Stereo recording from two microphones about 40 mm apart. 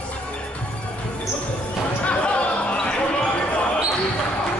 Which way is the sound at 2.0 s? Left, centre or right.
Left.